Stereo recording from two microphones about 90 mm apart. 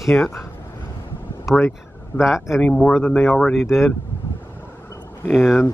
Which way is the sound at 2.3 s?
5° right (ahead or behind).